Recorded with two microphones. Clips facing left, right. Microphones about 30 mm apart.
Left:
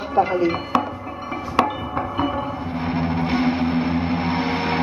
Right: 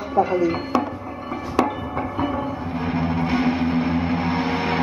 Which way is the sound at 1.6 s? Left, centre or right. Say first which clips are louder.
Left 1 dB; left.